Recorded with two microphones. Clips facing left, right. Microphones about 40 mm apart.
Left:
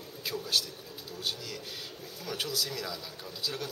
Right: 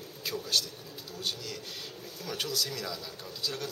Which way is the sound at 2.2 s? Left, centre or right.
Centre.